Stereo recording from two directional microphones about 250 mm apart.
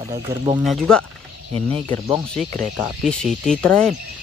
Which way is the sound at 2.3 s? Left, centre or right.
Centre.